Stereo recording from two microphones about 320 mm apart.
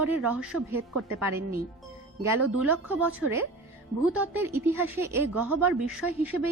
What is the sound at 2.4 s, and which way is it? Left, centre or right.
Speech, right.